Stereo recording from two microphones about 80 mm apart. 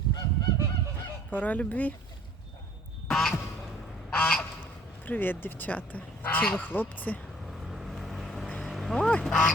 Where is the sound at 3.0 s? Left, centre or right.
Centre.